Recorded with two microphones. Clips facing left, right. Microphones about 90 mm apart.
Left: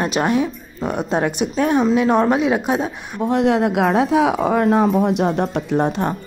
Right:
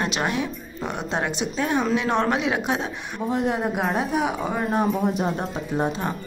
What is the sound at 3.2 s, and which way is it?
Speech, 90° left.